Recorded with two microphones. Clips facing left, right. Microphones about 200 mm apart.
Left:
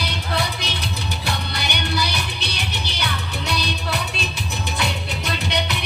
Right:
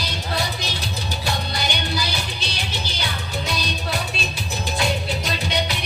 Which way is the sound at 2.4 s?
65° left (ahead or behind).